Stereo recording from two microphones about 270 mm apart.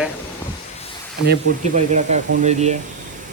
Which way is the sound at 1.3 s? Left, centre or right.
Right.